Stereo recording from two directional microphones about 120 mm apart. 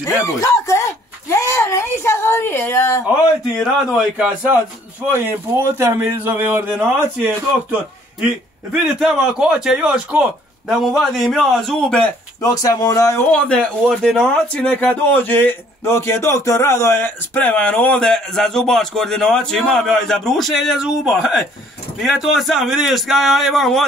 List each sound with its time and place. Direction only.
0.0 s speech: 25° left (ahead or behind)
3.9 s a man's voice: 5° right (ahead or behind)
9.0 s a man's voice: 5° right (ahead or behind)
12.4 s speech: 30° left (ahead or behind)
13.3 s a man's voice: 5° left (ahead or behind)